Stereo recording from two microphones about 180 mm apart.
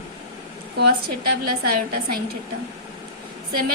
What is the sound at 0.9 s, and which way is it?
A woman's voice, 60° right (ahead or behind).